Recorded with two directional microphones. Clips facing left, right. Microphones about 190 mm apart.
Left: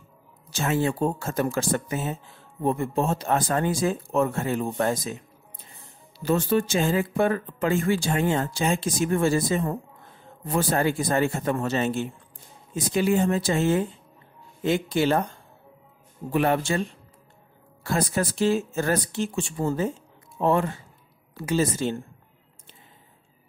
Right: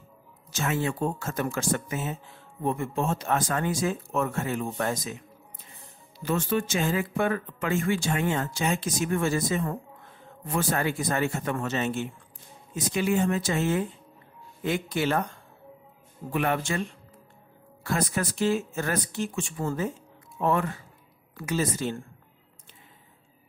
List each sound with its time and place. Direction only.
0.5 s speech: 30° left (ahead or behind)
6.1 s speech: 35° left (ahead or behind)
16.3 s speech: 35° left (ahead or behind)
17.8 s speech: 30° left (ahead or behind)